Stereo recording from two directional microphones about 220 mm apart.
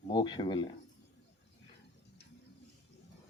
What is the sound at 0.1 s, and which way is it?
Speech, 20° left (ahead or behind).